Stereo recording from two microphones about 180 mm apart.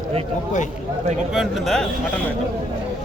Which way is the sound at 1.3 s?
Centre (ahead or behind).